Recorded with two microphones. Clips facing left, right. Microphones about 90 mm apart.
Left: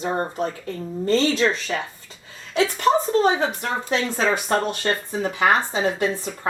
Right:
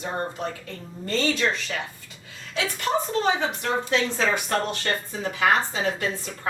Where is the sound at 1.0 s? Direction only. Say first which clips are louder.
Left 5 dB; 30° left (ahead or behind).